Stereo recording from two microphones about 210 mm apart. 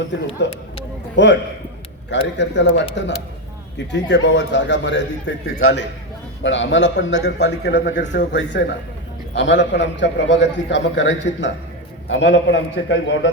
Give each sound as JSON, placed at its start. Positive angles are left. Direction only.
{"t": 0.4, "sound": "a man's voice", "side_deg": 55}